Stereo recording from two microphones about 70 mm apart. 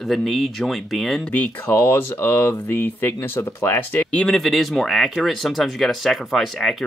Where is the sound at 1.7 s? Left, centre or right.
Left.